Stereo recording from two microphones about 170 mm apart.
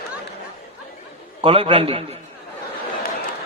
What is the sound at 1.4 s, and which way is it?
Speech, 30° right (ahead or behind).